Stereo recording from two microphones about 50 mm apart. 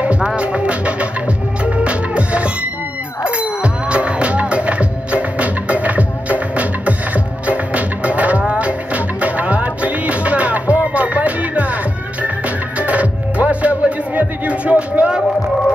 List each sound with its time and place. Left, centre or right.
0.0 s music: right